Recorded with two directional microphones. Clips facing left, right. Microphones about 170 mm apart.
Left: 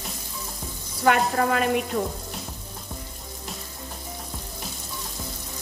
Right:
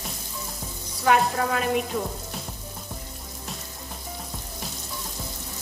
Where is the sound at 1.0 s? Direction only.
65° left (ahead or behind).